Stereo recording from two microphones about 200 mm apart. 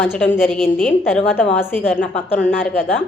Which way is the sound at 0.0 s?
10° left (ahead or behind).